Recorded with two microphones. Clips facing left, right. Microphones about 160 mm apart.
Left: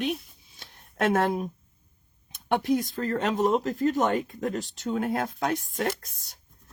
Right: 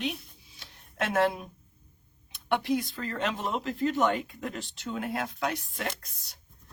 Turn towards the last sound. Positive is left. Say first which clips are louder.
# left 6 dB
turn(degrees=50)  # may be behind; listen again after turning